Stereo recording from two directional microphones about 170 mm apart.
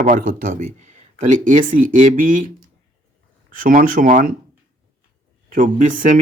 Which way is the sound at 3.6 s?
55° right (ahead or behind).